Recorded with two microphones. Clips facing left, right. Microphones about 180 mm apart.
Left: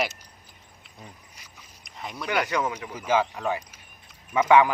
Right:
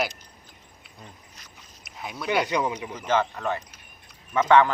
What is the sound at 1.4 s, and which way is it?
Boat, 10° left (ahead or behind).